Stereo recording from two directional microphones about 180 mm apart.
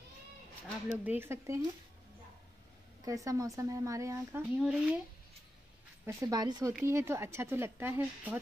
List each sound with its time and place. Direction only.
1.0 s speech: 10° right (ahead or behind)
3.1 s speech: 20° right (ahead or behind)
6.0 s speech: 15° right (ahead or behind)